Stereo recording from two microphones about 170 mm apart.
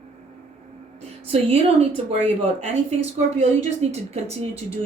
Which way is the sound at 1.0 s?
35° right (ahead or behind).